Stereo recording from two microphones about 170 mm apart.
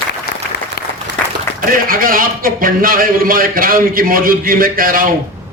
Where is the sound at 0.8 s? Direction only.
65° left (ahead or behind).